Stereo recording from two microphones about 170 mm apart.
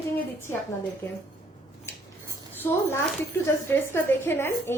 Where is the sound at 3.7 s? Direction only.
15° left (ahead or behind).